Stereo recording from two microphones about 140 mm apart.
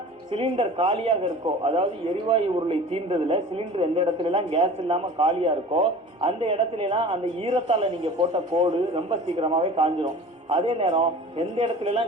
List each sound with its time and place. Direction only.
0.3 s a man's voice: 45° right (ahead or behind)